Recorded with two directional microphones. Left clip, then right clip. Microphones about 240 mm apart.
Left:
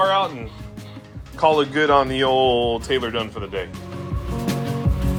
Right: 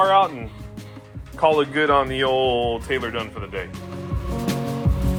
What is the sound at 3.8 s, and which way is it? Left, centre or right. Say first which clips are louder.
Music: even; centre.